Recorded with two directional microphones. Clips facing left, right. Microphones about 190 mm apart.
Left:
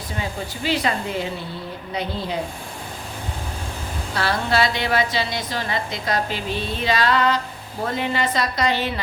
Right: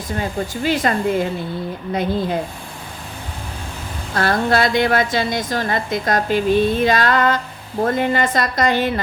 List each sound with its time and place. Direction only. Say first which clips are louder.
0.2 s a woman's voice: right 5 dB; 50° right (ahead or behind)
4.1 s a woman's voice: right 5 dB; 50° right (ahead or behind)